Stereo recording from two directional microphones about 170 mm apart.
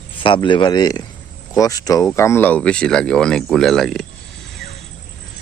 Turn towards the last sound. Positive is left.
turn(degrees=0)  # may be behind; listen again after turning